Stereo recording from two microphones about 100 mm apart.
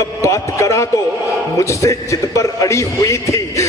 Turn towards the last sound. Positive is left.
turn(degrees=30)  # may be behind; listen again after turning